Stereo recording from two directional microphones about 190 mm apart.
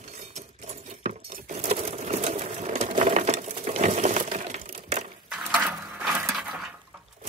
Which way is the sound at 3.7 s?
35° right (ahead or behind).